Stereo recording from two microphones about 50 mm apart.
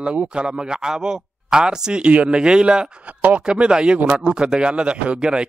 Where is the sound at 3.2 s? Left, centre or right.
Right.